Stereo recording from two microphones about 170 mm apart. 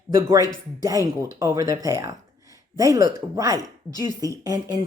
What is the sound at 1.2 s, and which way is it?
A woman's voice, 20° right (ahead or behind).